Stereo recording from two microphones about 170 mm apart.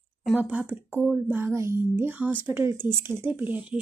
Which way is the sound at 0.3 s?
10° right (ahead or behind).